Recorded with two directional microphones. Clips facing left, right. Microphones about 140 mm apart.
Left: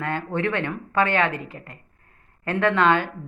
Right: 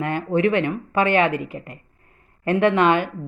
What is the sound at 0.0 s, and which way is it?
Speech, 15° right (ahead or behind).